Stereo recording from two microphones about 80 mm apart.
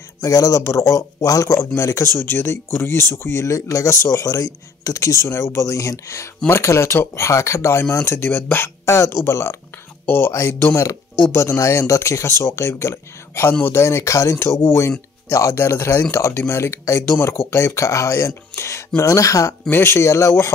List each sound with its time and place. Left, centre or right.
0.2 s speech: left
2.1 s speech: left
13.5 s speech: left
13.7 s speech: left
19.7 s speech: left